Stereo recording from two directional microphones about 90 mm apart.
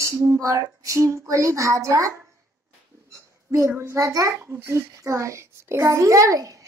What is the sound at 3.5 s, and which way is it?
A child's voice, 35° right (ahead or behind).